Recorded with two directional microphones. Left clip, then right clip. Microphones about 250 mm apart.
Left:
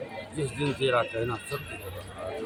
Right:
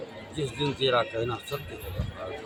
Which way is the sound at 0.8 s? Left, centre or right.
Centre.